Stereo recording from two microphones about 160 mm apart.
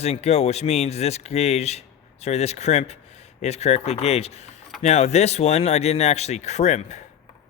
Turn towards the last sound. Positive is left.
turn(degrees=45)  # may be behind; listen again after turning